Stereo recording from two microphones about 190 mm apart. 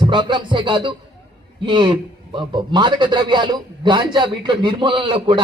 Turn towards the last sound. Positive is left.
turn(degrees=-25)  # may be behind; listen again after turning